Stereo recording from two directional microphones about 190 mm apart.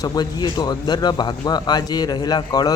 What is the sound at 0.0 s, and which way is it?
Speech, 20° left (ahead or behind).